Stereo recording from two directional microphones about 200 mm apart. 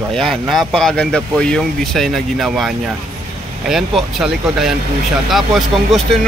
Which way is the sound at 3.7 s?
Centre (ahead or behind).